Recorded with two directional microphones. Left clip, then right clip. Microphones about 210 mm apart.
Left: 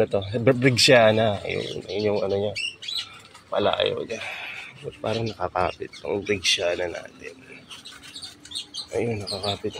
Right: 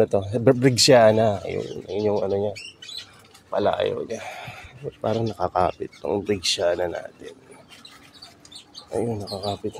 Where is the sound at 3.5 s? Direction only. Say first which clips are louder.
Even; 20° right (ahead or behind).